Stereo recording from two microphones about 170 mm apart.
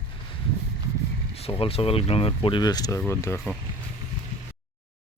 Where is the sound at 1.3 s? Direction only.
35° left (ahead or behind); by 3.6 s 15° left (ahead or behind).